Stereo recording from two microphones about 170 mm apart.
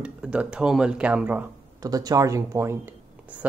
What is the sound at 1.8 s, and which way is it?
Speech, 20° right (ahead or behind).